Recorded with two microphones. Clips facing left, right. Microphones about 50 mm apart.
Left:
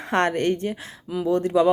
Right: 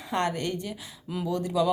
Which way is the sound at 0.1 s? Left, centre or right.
Left.